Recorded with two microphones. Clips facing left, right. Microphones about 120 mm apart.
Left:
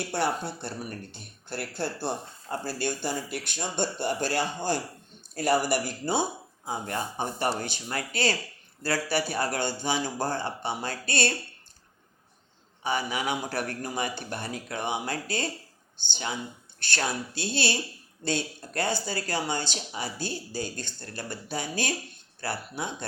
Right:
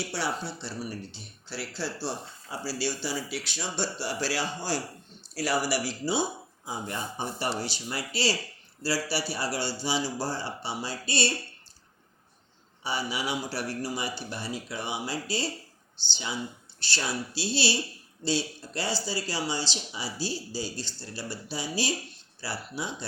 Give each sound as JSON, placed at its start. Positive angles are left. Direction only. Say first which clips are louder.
{"t": 0.0, "sound": "speech", "louder": "left 3 dB", "side_deg": 55}
{"t": 12.8, "sound": "speech", "louder": "left 3 dB", "side_deg": 50}